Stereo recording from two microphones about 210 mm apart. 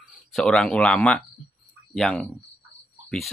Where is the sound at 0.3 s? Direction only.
Centre (ahead or behind).